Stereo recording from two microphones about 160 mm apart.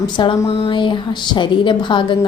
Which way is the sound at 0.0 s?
25° left (ahead or behind).